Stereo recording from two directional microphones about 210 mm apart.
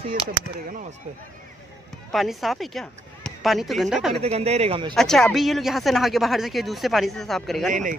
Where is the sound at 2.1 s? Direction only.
Centre (ahead or behind).